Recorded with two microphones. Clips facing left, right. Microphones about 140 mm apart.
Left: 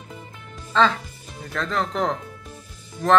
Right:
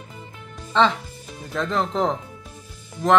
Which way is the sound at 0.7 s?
20° right (ahead or behind).